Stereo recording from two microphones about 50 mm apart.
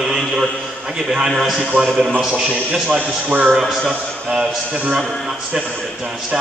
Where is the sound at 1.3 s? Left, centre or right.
Centre.